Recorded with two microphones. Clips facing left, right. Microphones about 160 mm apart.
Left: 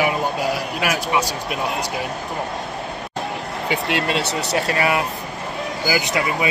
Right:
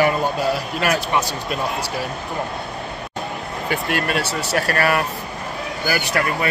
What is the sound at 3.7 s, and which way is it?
Speech, 20° left (ahead or behind).